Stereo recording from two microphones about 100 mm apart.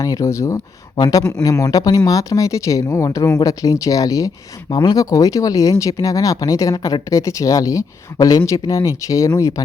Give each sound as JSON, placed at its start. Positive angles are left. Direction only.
{"t": 0.0, "sound": "speech", "side_deg": 35}
{"t": 0.9, "sound": "speech", "side_deg": 45}